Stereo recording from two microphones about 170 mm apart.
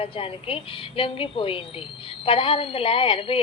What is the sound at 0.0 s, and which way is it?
A woman's voice, 35° left (ahead or behind).